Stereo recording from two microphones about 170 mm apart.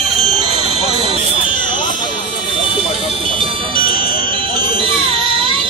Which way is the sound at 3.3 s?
30° right (ahead or behind).